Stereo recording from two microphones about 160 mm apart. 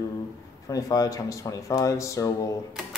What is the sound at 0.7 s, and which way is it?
Speech, 20° left (ahead or behind).